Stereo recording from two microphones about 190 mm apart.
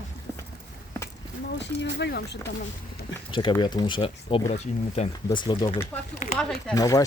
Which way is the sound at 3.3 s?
25° left (ahead or behind).